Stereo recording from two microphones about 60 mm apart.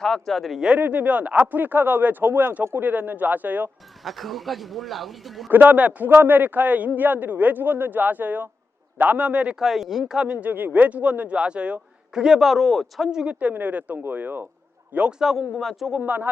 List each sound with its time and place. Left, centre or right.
0.0 s speech: centre
0.8 s a man's voice: right
4.0 s speech: centre
5.5 s a man's voice: right
6.1 s a man's voice: right; by 9.6 s centre
9.6 s speech: centre
10.4 s a man's voice: right
12.2 s speech: centre
13.1 s speech: centre
13.4 s a man's voice: right
15.2 s speech: centre
16.0 s a man's voice: right